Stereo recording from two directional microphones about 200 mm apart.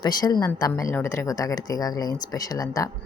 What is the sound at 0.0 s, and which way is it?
A woman's voice, 20° left (ahead or behind).